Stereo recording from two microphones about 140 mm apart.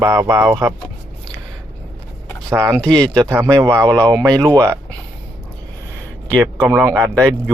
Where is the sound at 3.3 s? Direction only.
20° right (ahead or behind).